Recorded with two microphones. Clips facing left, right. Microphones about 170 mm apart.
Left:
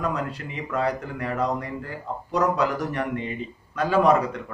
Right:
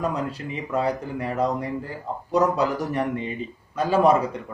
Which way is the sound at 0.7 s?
25° right (ahead or behind).